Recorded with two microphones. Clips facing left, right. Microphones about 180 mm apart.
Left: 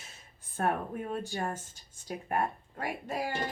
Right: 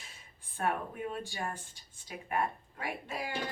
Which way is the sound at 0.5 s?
40° left (ahead or behind).